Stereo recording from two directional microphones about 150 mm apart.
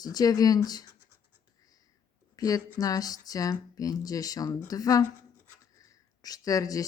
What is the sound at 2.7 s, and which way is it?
Speech, 25° left (ahead or behind).